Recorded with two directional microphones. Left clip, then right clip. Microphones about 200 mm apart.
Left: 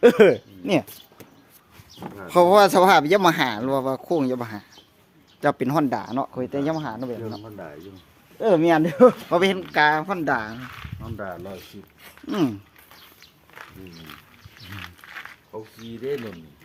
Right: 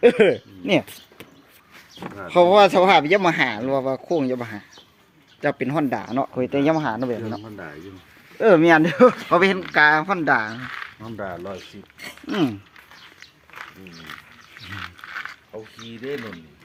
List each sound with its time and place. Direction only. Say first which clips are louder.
0.2 s speech: left 2 dB; 5° left (ahead or behind)
2.3 s speech: right 1 dB; 20° left (ahead or behind); by 10.8 s 10° right (ahead or behind)
11.2 s speech: right 3 dB; 40° right (ahead or behind)
12.3 s speech: right 1 dB; 5° right (ahead or behind)
14.8 s dog: right 5 dB; 10° right (ahead or behind)
16.1 s speech: even; centre (ahead or behind)